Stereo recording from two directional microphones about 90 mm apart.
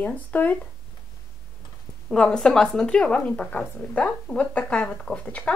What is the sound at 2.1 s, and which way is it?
Speech, 10° left (ahead or behind).